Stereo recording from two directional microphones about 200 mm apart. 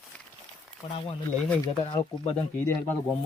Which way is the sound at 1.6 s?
25° left (ahead or behind).